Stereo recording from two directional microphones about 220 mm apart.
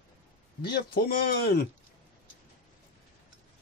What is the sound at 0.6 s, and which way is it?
Speech, 45° left (ahead or behind).